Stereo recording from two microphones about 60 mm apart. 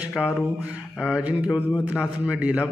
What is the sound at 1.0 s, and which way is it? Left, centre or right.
A man's voice, right.